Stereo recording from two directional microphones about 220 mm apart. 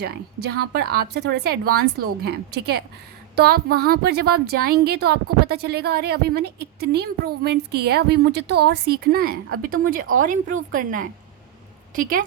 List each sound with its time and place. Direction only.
0.0 s a woman's voice: 45° right (ahead or behind)